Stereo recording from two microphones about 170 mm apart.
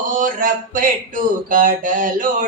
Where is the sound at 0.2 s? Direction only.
50° right (ahead or behind).